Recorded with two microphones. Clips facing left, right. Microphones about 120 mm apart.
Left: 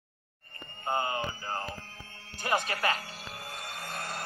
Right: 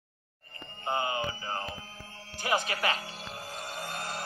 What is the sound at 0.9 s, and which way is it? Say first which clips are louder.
Mantra: even; 15° right (ahead or behind).